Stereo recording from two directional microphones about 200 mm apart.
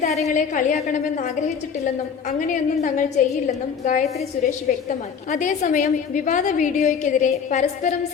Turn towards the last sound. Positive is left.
turn(degrees=40)  # may be behind; listen again after turning